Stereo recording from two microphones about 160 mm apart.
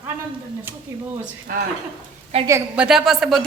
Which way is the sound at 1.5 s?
60° right (ahead or behind).